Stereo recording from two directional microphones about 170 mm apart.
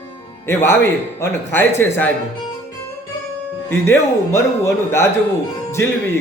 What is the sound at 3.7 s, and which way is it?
Speech, 15° left (ahead or behind).